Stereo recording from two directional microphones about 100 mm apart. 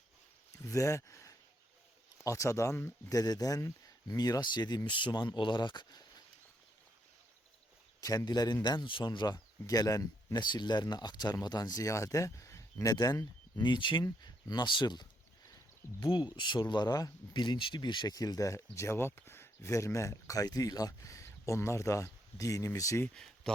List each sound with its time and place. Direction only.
0.5 s speech: 35° left (ahead or behind)
3.1 s speech: 40° left (ahead or behind)
8.0 s speech: 40° left (ahead or behind)
14.0 s speech: 40° left (ahead or behind)
23.1 s a sound: 5° left (ahead or behind)